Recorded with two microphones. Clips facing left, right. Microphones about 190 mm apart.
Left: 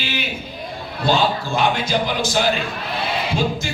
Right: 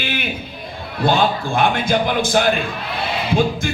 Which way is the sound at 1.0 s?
55° right (ahead or behind).